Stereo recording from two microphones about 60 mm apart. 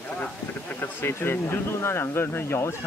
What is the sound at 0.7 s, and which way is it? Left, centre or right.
Speech, left.